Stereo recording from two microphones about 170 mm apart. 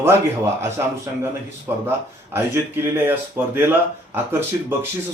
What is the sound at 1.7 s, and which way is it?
Speech, 15° right (ahead or behind).